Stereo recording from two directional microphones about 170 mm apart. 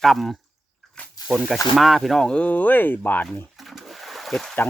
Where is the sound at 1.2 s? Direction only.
20° left (ahead or behind).